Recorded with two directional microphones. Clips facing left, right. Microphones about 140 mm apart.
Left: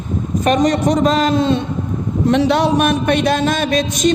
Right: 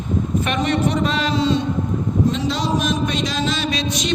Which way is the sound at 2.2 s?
70° left (ahead or behind).